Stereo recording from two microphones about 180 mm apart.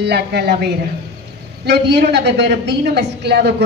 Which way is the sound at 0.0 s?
65° right (ahead or behind).